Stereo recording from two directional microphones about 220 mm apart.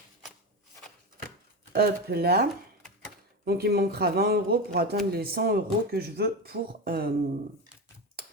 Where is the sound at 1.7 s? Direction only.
45° right (ahead or behind).